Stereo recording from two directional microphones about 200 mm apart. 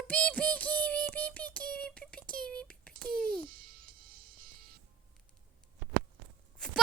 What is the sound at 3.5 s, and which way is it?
Music, 45° right (ahead or behind).